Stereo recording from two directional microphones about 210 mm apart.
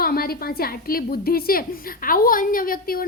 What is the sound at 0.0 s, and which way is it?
A woman's voice, 45° left (ahead or behind).